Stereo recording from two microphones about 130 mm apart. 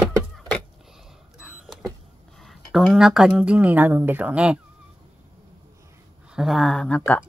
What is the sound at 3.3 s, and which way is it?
Speech, 10° right (ahead or behind).